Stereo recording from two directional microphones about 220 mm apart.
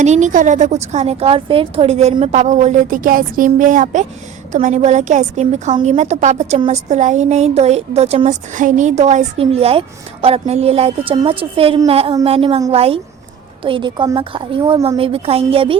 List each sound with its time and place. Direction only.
0.0 s a woman's voice: 30° right (ahead or behind)